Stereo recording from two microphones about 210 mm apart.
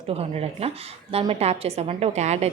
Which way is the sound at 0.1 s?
30° right (ahead or behind).